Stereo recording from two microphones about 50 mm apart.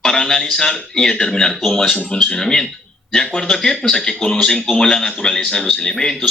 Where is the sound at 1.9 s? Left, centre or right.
Centre.